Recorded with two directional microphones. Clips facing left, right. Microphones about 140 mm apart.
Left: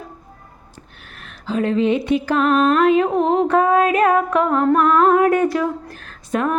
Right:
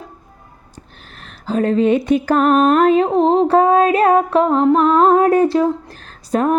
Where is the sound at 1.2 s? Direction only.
40° right (ahead or behind).